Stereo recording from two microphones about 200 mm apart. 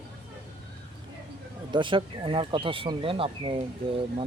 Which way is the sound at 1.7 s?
25° right (ahead or behind).